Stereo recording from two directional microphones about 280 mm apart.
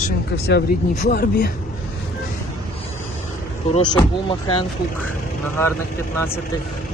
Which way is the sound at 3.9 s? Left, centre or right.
Centre.